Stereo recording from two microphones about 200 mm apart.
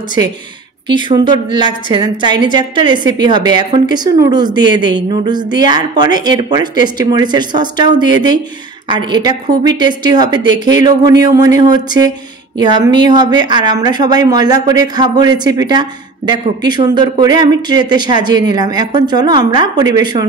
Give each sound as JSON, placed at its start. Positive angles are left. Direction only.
{"t": 0.8, "sound": "speech", "side_deg": -20}